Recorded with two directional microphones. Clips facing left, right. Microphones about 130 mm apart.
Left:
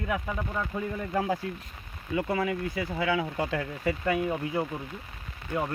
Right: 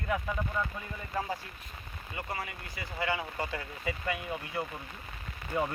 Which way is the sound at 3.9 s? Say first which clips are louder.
Left 8 dB; 45° left (ahead or behind).